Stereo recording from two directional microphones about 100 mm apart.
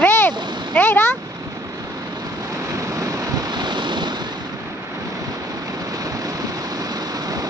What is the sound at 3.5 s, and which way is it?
Waves, 50° right (ahead or behind).